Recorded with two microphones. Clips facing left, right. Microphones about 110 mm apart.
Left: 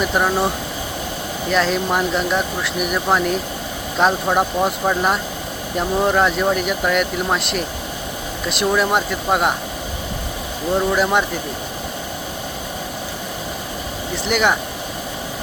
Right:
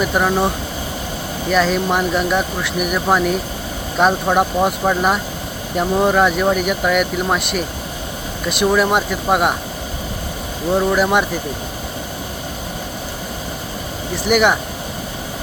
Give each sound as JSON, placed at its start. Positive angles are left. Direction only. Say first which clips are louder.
{"t": 0.0, "sound": "speech", "louder": "right 2 dB", "side_deg": 0}
{"t": 10.8, "sound": "speech", "louder": "right 2 dB", "side_deg": -5}
{"t": 14.3, "sound": "speech", "louder": "right 4 dB", "side_deg": -5}